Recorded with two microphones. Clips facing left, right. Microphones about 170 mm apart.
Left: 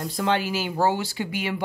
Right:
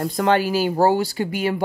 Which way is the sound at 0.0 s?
50° right (ahead or behind).